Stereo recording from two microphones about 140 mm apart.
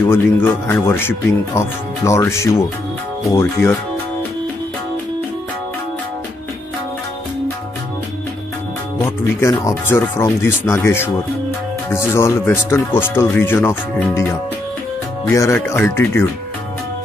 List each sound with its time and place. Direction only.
0.1 s speech: 15° left (ahead or behind)
9.0 s speech: 20° left (ahead or behind)
15.3 s speech: 20° left (ahead or behind)